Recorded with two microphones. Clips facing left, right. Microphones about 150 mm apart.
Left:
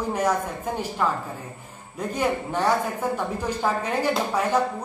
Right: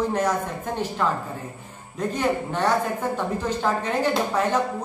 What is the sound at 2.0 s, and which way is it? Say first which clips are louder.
Speech: right 1 dB; 10° left (ahead or behind).